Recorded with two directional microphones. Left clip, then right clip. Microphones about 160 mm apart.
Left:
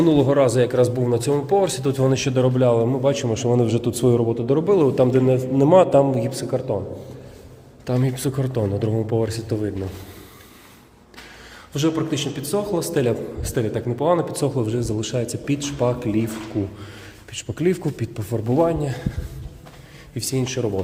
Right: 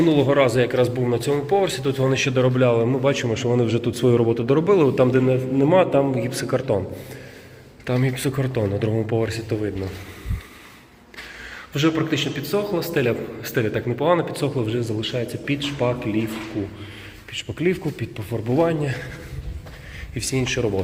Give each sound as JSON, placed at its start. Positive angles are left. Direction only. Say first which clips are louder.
{"t": 0.0, "sound": "speech", "louder": "left 1 dB", "side_deg": 35}
{"t": 2.5, "sound": "a man's voice", "louder": "even", "side_deg": 20}
{"t": 4.2, "sound": "a man's voice", "louder": "right 1 dB", "side_deg": 0}
{"t": 5.3, "sound": "a man's voice", "louder": "left 3 dB", "side_deg": 30}
{"t": 6.3, "sound": "a man's voice", "louder": "right 2 dB", "side_deg": 5}
{"t": 7.9, "sound": "a man's voice", "louder": "even", "side_deg": 20}
{"t": 11.7, "sound": "a man's voice", "louder": "right 1 dB", "side_deg": 15}
{"t": 15.0, "sound": "speech", "louder": "even", "side_deg": 45}
{"t": 17.3, "sound": "speech", "louder": "left 1 dB", "side_deg": 35}
{"t": 18.5, "sound": "a man's voice", "louder": "left 1 dB", "side_deg": 15}
{"t": 20.1, "sound": "a man's voice", "louder": "right 1 dB", "side_deg": 20}